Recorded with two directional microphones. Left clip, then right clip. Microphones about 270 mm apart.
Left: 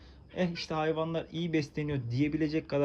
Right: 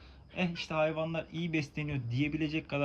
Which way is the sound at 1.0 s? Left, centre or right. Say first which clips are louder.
Left 2 dB; centre.